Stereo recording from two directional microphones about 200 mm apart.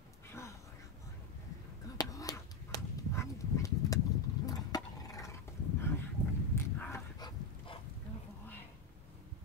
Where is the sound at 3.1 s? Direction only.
15° left (ahead or behind).